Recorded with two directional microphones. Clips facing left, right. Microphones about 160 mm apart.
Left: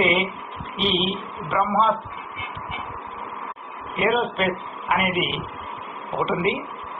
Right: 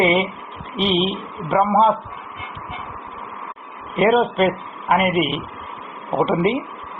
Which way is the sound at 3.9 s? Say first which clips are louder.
Right 6 dB; 45° right (ahead or behind).